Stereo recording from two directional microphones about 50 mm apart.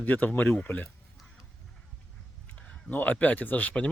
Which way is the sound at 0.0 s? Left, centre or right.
Left.